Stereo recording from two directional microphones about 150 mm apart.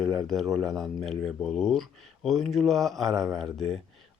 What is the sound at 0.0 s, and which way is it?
Speech, 5° left (ahead or behind).